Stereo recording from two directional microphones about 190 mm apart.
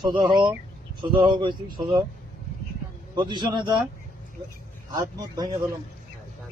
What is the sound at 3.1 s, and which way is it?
Speech, 25° right (ahead or behind).